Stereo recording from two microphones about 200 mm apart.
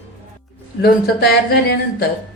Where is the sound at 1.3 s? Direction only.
50° left (ahead or behind).